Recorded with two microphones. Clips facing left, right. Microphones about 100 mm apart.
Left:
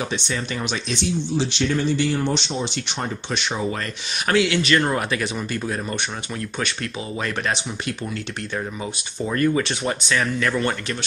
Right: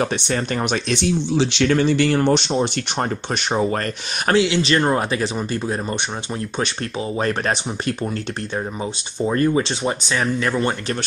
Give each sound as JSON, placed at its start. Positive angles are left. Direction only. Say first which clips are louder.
{"t": 0.0, "sound": "speech", "louder": "right 5 dB", "side_deg": -50}
{"t": 4.3, "sound": "speech", "louder": "right 2 dB", "side_deg": -25}
{"t": 7.2, "sound": "speech", "louder": "right 4 dB", "side_deg": -40}
{"t": 9.2, "sound": "speech", "louder": "right 3 dB", "side_deg": -25}